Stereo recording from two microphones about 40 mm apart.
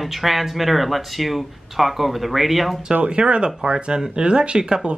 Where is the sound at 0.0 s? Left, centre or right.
Centre.